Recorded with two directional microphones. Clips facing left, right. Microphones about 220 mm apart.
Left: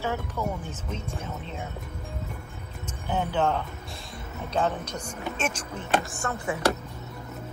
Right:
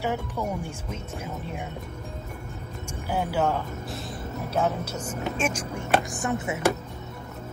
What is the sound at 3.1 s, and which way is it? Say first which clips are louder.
Speech: even; 10° right (ahead or behind).